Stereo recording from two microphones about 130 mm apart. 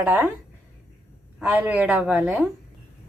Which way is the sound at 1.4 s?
15° right (ahead or behind).